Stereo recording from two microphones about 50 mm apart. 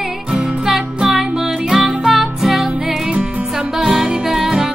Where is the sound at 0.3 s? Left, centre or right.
Centre.